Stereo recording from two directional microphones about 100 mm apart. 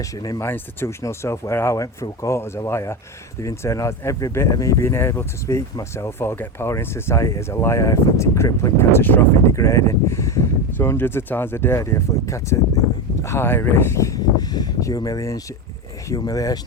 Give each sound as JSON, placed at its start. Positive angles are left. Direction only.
{"t": 0.2, "sound": "speech", "side_deg": 35}
{"t": 0.4, "sound": "speech", "side_deg": 25}